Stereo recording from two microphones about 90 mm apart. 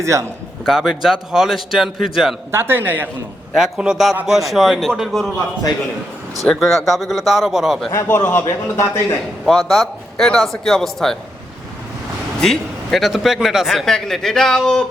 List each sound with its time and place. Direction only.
0.0 s a man's voice: 35° right (ahead or behind)
0.6 s a man's voice: 5° right (ahead or behind)
2.5 s a man's voice: 25° right (ahead or behind)
3.5 s a man's voice: 5° right (ahead or behind)
6.5 s a man's voice: centre (ahead or behind)
7.9 s a man's voice: 25° left (ahead or behind)
9.5 s a man's voice: centre (ahead or behind)
12.4 s a man's voice: 5° left (ahead or behind)